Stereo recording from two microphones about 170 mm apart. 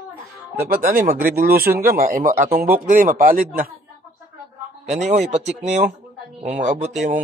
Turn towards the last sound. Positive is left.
turn(degrees=-45)  # may be behind; listen again after turning